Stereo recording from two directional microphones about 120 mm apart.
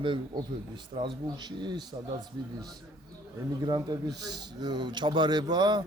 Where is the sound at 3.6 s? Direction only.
35° right (ahead or behind).